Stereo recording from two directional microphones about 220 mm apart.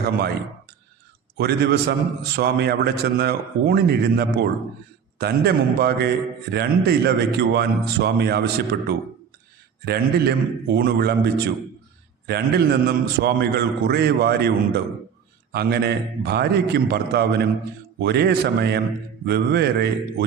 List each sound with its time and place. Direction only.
1.4 s a man's voice: 45° right (ahead or behind)